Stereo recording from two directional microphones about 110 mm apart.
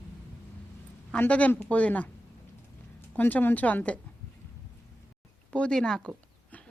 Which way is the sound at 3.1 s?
15° left (ahead or behind).